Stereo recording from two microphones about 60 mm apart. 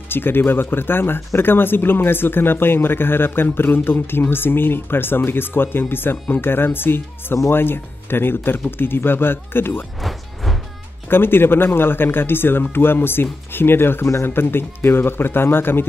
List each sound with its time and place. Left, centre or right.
0.1 s speech: left
10.0 s music: centre
11.1 s speech: left